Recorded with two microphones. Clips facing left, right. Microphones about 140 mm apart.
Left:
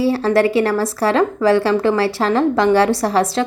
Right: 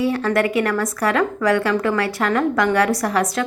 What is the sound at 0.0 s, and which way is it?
Speech, 30° left (ahead or behind).